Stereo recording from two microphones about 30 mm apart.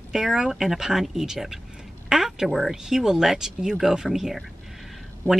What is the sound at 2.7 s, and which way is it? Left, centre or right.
Speech, centre.